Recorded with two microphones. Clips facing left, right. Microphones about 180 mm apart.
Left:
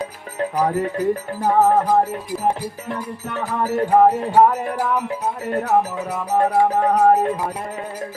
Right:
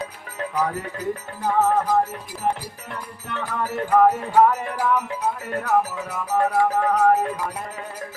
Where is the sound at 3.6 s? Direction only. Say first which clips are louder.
Left 3 dB; 35° left (ahead or behind).